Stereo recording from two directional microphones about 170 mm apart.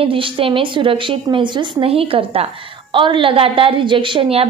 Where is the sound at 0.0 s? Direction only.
30° right (ahead or behind).